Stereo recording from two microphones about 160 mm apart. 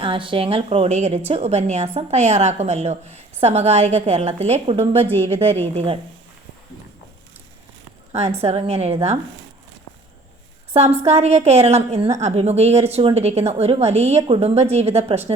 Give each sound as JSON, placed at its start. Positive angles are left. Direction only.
{"t": 0.0, "sound": "a woman's voice", "side_deg": -35}
{"t": 8.1, "sound": "a woman's voice", "side_deg": -40}
{"t": 10.8, "sound": "a woman's voice", "side_deg": -40}